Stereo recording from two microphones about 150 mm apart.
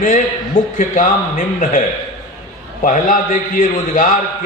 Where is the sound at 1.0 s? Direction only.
60° left (ahead or behind).